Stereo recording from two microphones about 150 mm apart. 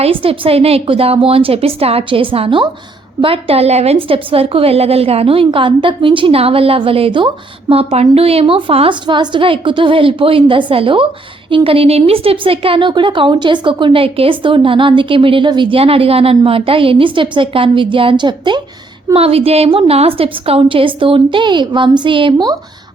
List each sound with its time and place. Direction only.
0.0 s a woman's voice: 40° right (ahead or behind)
19.1 s a woman's voice: 40° right (ahead or behind)